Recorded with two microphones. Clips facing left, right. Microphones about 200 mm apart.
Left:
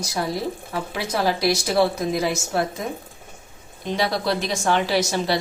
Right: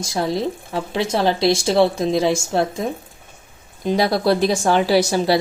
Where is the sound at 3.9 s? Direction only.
35° right (ahead or behind).